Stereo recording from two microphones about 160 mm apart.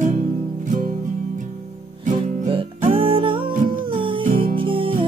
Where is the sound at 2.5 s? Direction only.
35° right (ahead or behind).